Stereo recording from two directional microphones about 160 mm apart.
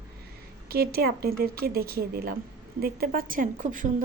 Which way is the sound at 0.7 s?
70° right (ahead or behind).